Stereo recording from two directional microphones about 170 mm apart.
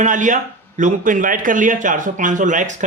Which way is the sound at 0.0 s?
50° right (ahead or behind).